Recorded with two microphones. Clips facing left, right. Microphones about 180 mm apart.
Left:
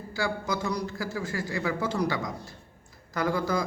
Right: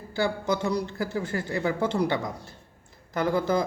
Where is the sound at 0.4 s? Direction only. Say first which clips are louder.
Right 4 dB; 30° right (ahead or behind).